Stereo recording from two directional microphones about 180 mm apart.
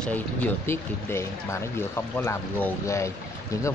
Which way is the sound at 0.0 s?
10° left (ahead or behind).